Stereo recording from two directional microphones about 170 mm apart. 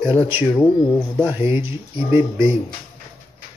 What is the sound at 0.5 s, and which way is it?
Speech, 10° left (ahead or behind).